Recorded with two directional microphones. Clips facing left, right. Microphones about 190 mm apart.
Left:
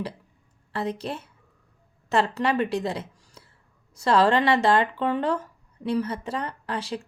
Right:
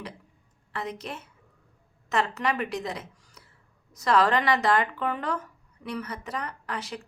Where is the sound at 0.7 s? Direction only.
30° left (ahead or behind).